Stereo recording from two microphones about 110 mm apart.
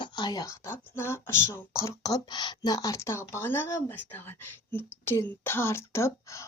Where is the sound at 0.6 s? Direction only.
20° left (ahead or behind).